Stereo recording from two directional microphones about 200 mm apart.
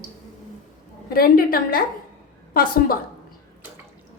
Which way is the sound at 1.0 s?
50° left (ahead or behind).